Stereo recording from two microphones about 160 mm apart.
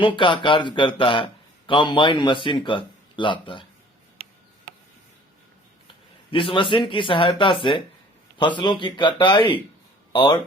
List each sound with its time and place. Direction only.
0.0 s a man's voice: 30° left (ahead or behind)
6.3 s a man's voice: 35° left (ahead or behind)